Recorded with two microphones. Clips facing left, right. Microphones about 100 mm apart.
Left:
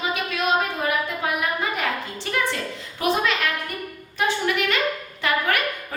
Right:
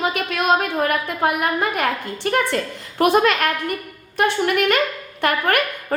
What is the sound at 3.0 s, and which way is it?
Speech, 60° right (ahead or behind).